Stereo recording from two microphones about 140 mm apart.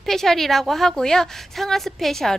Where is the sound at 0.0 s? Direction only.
Centre (ahead or behind).